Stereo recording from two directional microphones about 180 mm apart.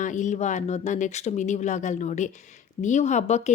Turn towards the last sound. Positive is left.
turn(degrees=40)  # may be behind; listen again after turning